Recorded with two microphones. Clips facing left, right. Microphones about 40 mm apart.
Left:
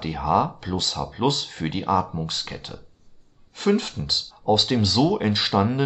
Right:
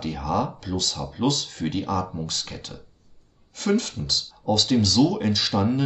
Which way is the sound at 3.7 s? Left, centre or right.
Left.